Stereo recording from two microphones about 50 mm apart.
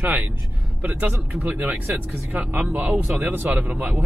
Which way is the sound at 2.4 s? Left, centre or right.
Right.